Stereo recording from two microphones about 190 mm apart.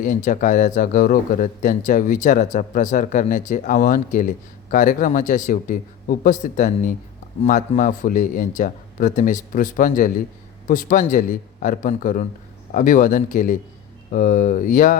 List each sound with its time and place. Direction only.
0.0 s speech: 45° left (ahead or behind)